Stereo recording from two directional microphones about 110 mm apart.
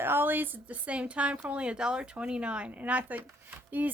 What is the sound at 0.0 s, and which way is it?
A woman's voice, 20° right (ahead or behind).